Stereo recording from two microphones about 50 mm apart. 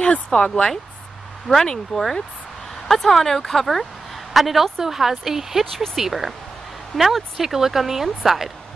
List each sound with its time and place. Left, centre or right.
0.0 s a woman's voice: centre